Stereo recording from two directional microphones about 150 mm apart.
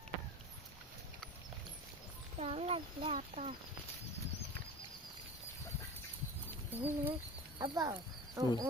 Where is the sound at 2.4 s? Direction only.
45° right (ahead or behind).